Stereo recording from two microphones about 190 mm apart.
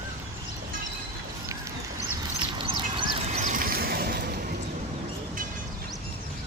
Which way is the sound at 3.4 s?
45° right (ahead or behind).